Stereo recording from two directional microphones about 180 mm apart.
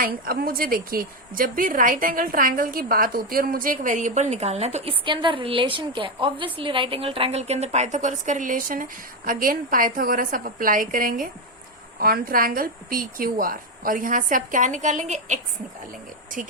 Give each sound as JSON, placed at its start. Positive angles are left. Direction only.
{"t": 0.0, "sound": "a woman's voice", "side_deg": -55}